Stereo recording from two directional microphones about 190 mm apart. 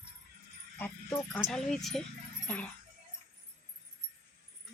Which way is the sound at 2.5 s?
10° left (ahead or behind).